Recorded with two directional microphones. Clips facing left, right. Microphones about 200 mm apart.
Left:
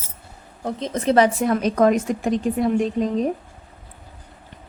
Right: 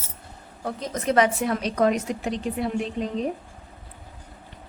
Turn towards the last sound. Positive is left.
turn(degrees=45)  # may be behind; listen again after turning